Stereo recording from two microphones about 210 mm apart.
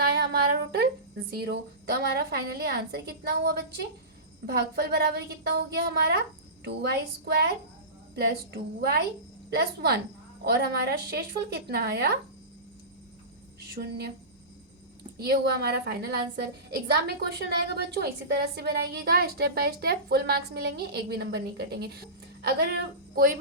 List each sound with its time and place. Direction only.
0.0 s a sound: 50° right (ahead or behind)
1.3 s a woman's voice: 50° right (ahead or behind)
7.3 s a woman's voice: 50° right (ahead or behind)
13.7 s a woman's voice: 50° right (ahead or behind)
15.2 s a woman's voice: 50° right (ahead or behind)
17.7 s a woman's voice: 50° right (ahead or behind)